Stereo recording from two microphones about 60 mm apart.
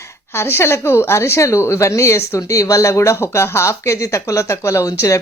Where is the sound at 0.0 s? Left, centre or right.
Left.